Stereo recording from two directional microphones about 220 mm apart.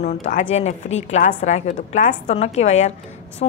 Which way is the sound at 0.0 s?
30° left (ahead or behind).